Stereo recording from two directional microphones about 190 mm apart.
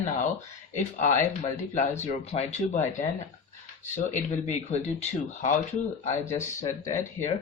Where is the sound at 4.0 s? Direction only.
40° left (ahead or behind).